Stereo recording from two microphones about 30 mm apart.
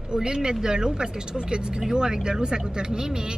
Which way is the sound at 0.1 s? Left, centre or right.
Right.